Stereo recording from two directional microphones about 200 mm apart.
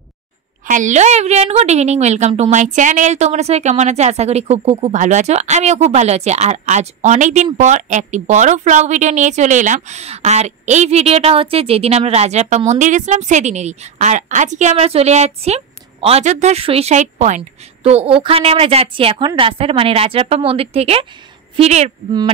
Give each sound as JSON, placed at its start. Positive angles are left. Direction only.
{"t": 0.7, "sound": "speech", "side_deg": -40}